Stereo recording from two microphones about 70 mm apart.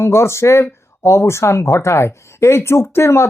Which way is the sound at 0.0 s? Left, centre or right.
Left.